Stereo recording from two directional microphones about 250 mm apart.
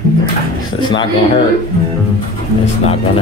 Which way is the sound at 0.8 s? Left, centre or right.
Centre.